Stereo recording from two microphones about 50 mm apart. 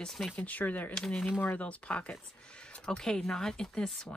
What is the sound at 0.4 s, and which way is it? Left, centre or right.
Speech, left.